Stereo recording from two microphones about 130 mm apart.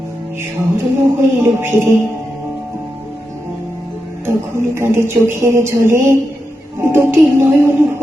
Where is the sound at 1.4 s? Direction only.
20° right (ahead or behind).